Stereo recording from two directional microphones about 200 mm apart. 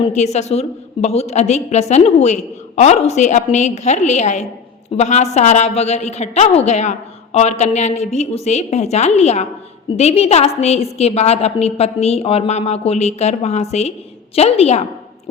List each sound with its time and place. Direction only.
0.0 s a woman's voice: 35° left (ahead or behind)